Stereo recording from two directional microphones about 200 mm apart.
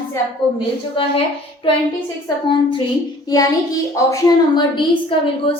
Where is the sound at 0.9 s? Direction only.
25° left (ahead or behind).